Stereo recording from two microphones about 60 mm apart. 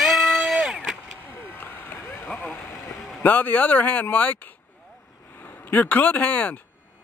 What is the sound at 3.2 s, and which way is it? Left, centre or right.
Speech, left.